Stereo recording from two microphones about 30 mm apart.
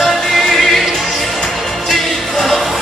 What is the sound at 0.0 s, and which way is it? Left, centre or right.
Music, centre.